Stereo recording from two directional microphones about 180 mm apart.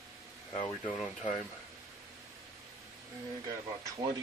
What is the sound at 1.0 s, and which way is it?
Speech, 5° left (ahead or behind).